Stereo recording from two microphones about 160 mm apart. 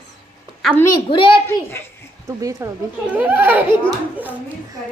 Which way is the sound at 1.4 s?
15° left (ahead or behind).